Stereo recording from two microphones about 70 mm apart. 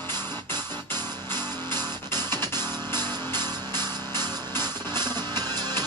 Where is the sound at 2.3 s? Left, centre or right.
Left.